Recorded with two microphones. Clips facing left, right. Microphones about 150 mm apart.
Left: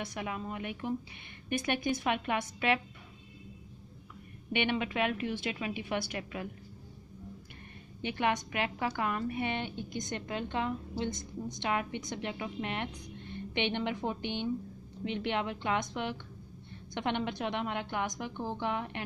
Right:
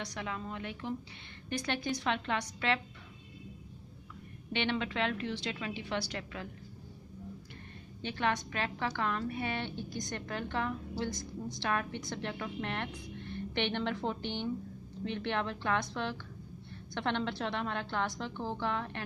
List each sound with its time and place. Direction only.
0.1 s a woman's voice: 15° left (ahead or behind)
2.0 s a woman's voice: 15° left (ahead or behind)
4.5 s a woman's voice: 15° left (ahead or behind)
8.0 s a woman's voice: 15° left (ahead or behind)